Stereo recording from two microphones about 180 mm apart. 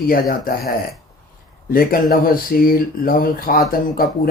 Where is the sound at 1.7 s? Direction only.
55° left (ahead or behind).